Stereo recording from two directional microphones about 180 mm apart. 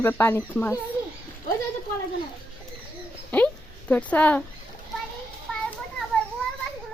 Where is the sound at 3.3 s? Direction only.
10° left (ahead or behind).